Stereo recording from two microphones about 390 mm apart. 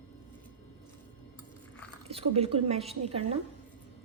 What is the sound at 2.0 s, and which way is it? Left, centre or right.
A woman's voice, centre.